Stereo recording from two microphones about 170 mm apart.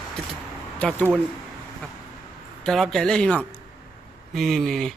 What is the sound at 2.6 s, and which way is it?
Speech, centre (ahead or behind).